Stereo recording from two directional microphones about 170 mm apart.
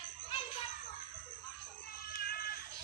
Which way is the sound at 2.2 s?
60° left (ahead or behind).